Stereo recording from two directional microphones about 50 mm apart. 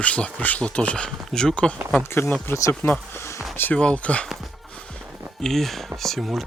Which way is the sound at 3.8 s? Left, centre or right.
Left.